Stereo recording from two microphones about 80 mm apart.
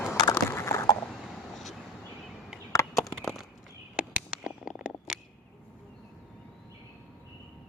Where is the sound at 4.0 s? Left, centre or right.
Centre.